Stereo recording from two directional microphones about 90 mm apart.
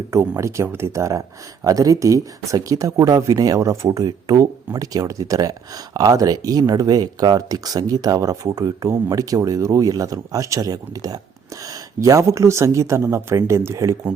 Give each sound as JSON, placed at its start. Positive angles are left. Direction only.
{"t": 0.1, "sound": "speech", "side_deg": -35}